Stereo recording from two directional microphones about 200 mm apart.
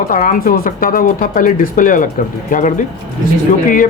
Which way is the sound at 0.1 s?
45° left (ahead or behind).